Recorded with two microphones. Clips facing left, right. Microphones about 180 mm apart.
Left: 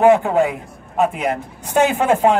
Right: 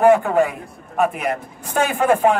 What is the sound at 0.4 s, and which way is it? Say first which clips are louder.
A man's voice: left 1 dB; 20° left (ahead or behind).